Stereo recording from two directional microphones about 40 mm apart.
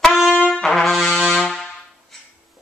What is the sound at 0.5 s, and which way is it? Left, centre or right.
Brass instrument, centre.